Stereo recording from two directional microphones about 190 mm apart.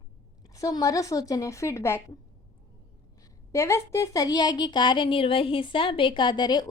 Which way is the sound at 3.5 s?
15° left (ahead or behind).